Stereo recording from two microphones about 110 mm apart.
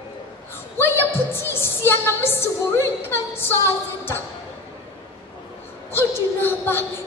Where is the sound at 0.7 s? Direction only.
20° left (ahead or behind).